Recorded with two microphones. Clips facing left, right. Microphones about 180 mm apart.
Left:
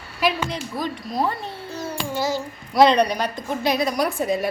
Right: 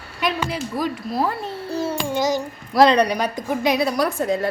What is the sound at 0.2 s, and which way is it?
A woman's voice, centre (ahead or behind).